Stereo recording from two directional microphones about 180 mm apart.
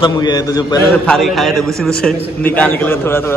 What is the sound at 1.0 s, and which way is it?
A man's voice, centre (ahead or behind).